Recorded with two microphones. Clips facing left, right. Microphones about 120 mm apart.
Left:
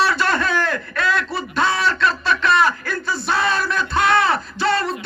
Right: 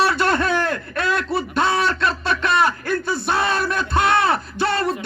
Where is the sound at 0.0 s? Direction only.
55° right (ahead or behind).